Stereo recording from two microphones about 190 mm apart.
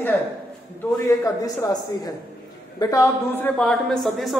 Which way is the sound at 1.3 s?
20° left (ahead or behind).